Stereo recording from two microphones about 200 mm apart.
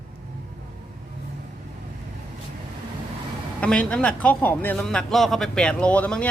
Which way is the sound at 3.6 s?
5° left (ahead or behind).